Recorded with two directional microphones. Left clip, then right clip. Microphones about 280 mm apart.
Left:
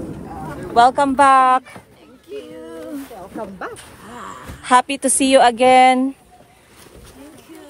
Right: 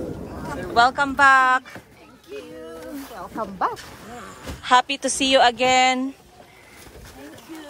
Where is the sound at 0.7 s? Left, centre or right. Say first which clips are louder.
Left 5 dB; centre.